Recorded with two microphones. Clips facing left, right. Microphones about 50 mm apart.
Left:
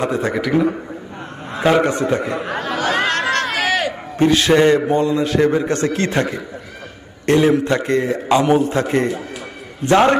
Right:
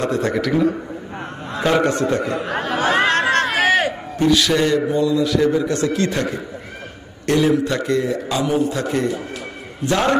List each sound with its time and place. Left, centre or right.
0.0 s a man's voice: centre
2.5 s chatter: right
4.2 s a man's voice: left